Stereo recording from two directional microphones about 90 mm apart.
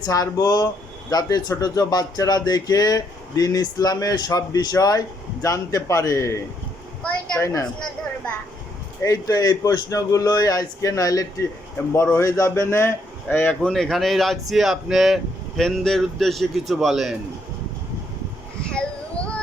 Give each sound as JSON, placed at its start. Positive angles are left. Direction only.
{"t": 0.0, "sound": "speech", "side_deg": 45}
{"t": 7.4, "sound": "a man's voice", "side_deg": 40}
{"t": 9.0, "sound": "a man's voice", "side_deg": 40}
{"t": 11.8, "sound": "speech", "side_deg": 25}
{"t": 12.1, "sound": "a man's voice", "side_deg": 35}
{"t": 13.3, "sound": "speech", "side_deg": 20}
{"t": 13.6, "sound": "speech", "side_deg": 5}
{"t": 18.7, "sound": "child singing", "side_deg": 10}